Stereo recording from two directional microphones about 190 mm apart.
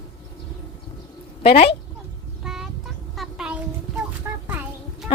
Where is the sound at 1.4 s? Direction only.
30° left (ahead or behind).